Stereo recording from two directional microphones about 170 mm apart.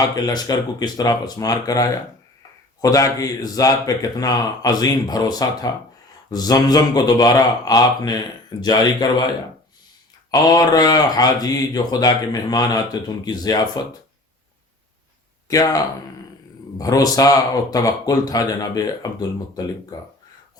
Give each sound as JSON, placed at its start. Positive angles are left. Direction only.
{"t": 0.3, "sound": "speech", "side_deg": 20}
{"t": 10.3, "sound": "speech", "side_deg": 25}
{"t": 15.4, "sound": "speech", "side_deg": 20}